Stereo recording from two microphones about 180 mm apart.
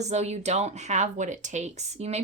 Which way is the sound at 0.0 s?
40° right (ahead or behind).